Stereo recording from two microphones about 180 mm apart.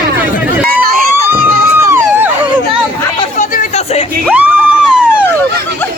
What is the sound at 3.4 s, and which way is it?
Chatter, 40° left (ahead or behind).